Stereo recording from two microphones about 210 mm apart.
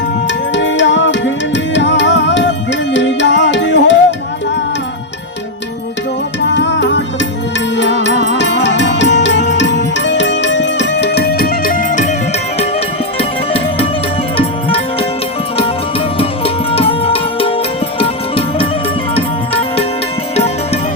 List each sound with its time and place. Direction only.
0.3 s music: 60° left (ahead or behind)
6.5 s music: 55° left (ahead or behind); by 12.1 s 35° left (ahead or behind)
13.1 s music: 25° left (ahead or behind)
16.1 s music: 25° left (ahead or behind)